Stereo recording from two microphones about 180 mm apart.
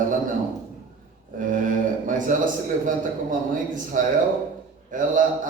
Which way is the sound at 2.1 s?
45° right (ahead or behind).